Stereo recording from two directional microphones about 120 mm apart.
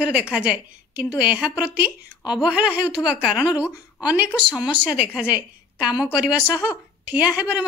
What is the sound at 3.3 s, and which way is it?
Speech, 35° left (ahead or behind).